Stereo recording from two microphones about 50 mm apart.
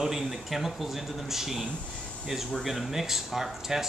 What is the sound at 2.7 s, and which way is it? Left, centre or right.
Speech, centre.